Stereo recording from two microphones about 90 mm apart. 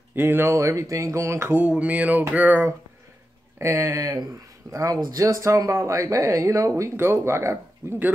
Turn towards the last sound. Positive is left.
turn(degrees=-30)  # may be behind; listen again after turning